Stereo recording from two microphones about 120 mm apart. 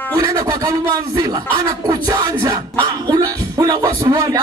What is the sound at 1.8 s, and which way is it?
Music, 35° right (ahead or behind).